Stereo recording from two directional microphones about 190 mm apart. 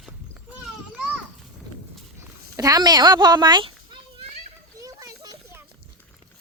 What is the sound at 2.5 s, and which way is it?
A child's voice, 20° right (ahead or behind).